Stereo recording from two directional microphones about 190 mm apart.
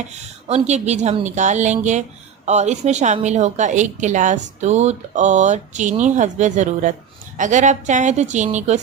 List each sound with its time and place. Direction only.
0.4 s a woman's voice: 35° right (ahead or behind)